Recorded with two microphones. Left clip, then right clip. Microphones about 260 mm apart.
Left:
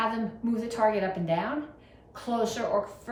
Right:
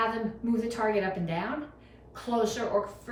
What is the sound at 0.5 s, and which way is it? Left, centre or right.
Speech, centre.